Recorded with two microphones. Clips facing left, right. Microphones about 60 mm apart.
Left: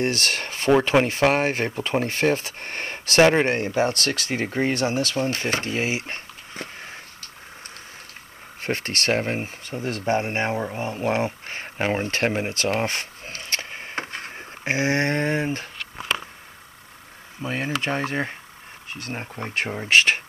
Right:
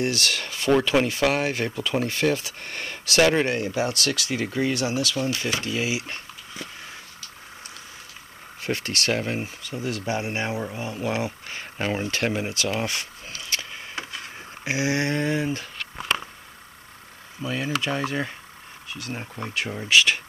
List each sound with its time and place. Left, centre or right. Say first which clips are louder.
0.0 s speech: left 1 dB; left
8.5 s speech: left 1 dB; left
17.4 s speech: even; left